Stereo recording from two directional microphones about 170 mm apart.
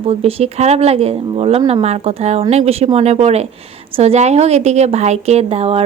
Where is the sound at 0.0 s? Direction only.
35° right (ahead or behind).